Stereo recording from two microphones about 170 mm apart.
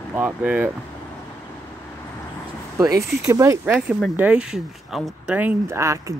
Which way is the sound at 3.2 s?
20° right (ahead or behind).